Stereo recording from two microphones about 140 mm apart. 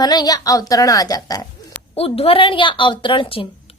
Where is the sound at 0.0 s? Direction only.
30° left (ahead or behind).